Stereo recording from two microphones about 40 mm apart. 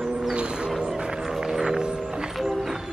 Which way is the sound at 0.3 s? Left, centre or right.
Right.